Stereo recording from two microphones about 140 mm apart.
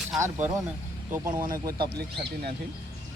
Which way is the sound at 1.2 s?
80° right.